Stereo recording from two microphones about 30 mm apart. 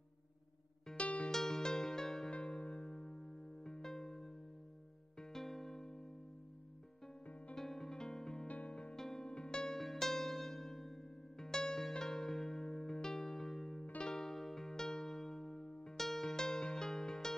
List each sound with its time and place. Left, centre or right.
0.9 s music: left
1.3 s music: centre
2.3 s music: left
3.0 s music: left
5.2 s music: centre
7.5 s music: centre
8.5 s music: left
8.9 s music: centre
9.3 s music: left
9.7 s music: centre
14.3 s music: centre
15.6 s music: left
16.2 s music: centre